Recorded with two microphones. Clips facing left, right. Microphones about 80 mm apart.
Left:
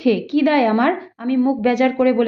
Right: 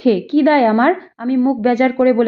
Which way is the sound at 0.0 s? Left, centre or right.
Right.